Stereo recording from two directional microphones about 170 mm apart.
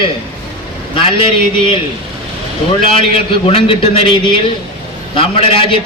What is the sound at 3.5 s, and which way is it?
A man's voice, 35° left (ahead or behind).